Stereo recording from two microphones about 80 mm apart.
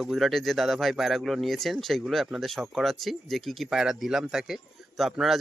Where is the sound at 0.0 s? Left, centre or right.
Centre.